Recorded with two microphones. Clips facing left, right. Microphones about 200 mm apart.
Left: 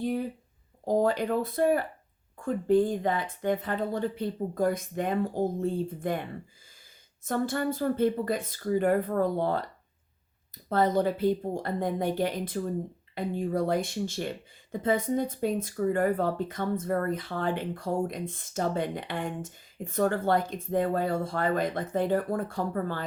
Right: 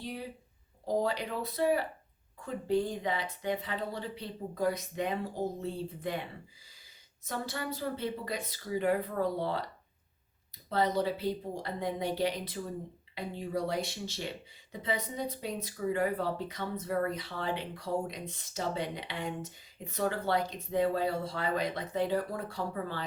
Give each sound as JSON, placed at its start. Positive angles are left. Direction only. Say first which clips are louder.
{"t": 0.0, "sound": "a sound", "louder": "left 10 dB", "side_deg": 50}
{"t": 0.9, "sound": "speech", "louder": "left 6 dB", "side_deg": 50}
{"t": 7.3, "sound": "speech", "louder": "left 9 dB", "side_deg": 50}
{"t": 10.7, "sound": "speech", "louder": "left 5 dB", "side_deg": 50}